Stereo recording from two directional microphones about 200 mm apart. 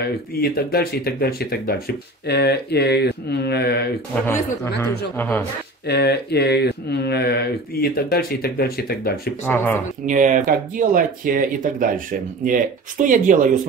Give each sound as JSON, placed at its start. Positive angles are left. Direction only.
{"t": 0.0, "sound": "speech", "side_deg": 50}
{"t": 4.8, "sound": "a man's voice", "side_deg": 10}
{"t": 5.9, "sound": "speech", "side_deg": 55}
{"t": 9.4, "sound": "a man's voice", "side_deg": 10}
{"t": 10.0, "sound": "speech", "side_deg": -40}